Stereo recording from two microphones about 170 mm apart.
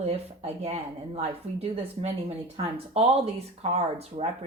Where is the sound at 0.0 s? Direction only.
35° right (ahead or behind).